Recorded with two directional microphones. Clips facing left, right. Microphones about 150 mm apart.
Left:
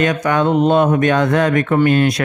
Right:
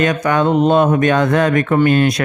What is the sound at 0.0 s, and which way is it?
A man's voice, 40° right (ahead or behind).